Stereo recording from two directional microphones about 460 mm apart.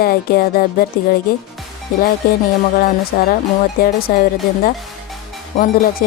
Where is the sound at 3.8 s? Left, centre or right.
Centre.